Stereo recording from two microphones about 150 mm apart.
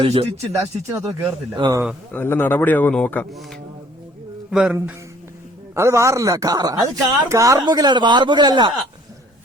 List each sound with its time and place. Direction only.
0.0 s speech: 40° right (ahead or behind)
0.6 s speech: 20° right (ahead or behind)
2.1 s speech: 15° left (ahead or behind)
4.5 s music: 5° right (ahead or behind)
5.7 s speech: 20° right (ahead or behind)